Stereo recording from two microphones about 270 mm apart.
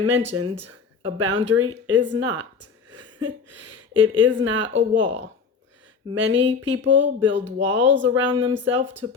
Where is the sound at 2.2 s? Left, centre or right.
Right.